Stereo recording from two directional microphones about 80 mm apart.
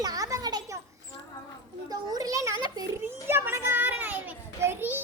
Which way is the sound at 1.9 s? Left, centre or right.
Right.